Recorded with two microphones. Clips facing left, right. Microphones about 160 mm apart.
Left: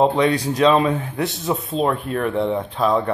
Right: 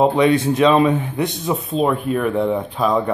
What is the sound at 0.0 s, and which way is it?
Speech, 5° right (ahead or behind).